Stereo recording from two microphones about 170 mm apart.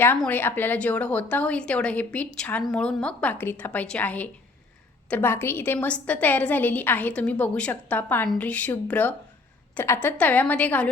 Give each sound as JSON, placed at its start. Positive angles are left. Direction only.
{"t": 0.2, "sound": "a woman's voice", "side_deg": 10}